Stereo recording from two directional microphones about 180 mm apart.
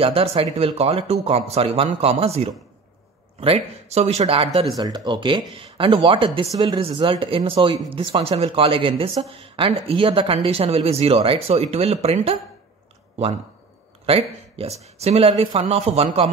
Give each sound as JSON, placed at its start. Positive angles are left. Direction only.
{"t": 0.0, "sound": "speech", "side_deg": -30}
{"t": 4.7, "sound": "speech", "side_deg": -20}
{"t": 14.0, "sound": "speech", "side_deg": -35}